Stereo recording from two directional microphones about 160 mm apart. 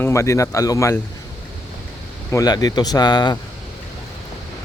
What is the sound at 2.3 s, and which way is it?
Speech, 25° left (ahead or behind).